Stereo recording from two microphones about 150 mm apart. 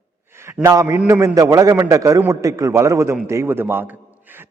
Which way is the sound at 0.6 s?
20° right (ahead or behind).